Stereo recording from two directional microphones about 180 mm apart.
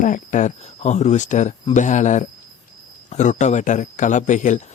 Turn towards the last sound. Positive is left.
turn(degrees=45)  # may be behind; listen again after turning